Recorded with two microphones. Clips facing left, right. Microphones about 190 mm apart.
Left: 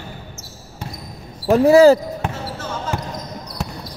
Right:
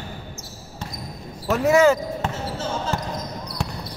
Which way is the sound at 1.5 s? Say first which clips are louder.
Left 7 dB; 35° left (ahead or behind).